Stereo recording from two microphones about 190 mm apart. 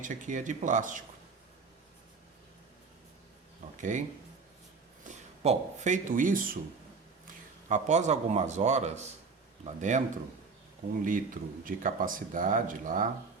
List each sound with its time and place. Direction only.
0.0 s a man's voice: 40° right (ahead or behind)
3.8 s speech: 40° right (ahead or behind)
5.0 s speech: 35° right (ahead or behind)
7.7 s a man's voice: 40° right (ahead or behind)
11.0 s speech: 45° right (ahead or behind)